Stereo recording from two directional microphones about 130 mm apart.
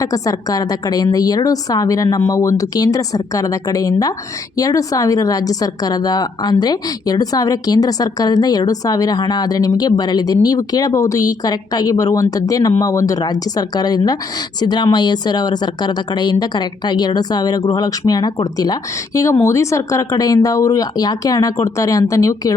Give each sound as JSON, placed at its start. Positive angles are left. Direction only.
{"t": 0.0, "sound": "speech", "side_deg": 25}